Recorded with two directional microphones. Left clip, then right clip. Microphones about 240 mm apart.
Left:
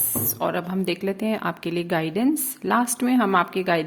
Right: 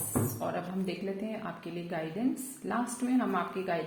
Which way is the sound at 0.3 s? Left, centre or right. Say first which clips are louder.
Left 10 dB; left.